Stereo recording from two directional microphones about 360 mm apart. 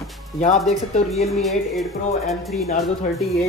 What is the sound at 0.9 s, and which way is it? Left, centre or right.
Speech, centre.